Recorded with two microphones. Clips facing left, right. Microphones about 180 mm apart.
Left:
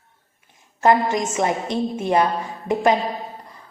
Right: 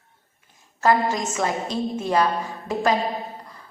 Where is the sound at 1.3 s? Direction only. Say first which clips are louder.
Left 3 dB; 20° left (ahead or behind).